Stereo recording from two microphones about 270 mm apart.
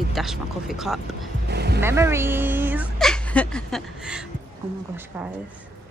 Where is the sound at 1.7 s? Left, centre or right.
Centre.